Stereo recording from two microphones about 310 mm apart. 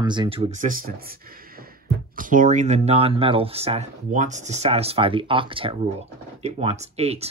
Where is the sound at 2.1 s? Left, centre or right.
Right.